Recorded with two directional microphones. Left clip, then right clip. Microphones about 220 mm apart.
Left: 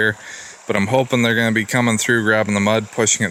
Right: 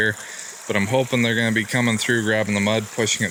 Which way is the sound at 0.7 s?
35° left (ahead or behind).